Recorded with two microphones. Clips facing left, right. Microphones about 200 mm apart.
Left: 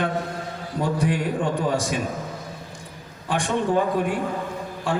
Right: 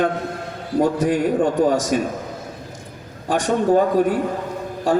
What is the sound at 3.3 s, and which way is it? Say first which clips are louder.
A man's voice: right 5 dB; 40° right (ahead or behind).